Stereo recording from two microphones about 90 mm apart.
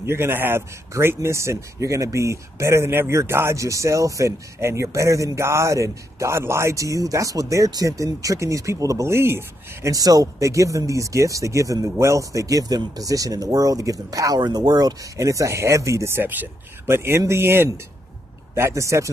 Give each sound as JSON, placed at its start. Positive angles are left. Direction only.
{"t": 0.0, "sound": "speech", "side_deg": -25}
{"t": 9.9, "sound": "speech", "side_deg": -40}